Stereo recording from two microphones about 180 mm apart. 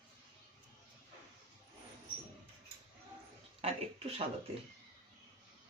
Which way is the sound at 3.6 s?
35° right (ahead or behind).